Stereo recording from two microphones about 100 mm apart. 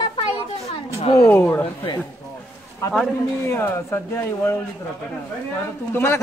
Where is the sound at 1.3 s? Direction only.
20° left (ahead or behind).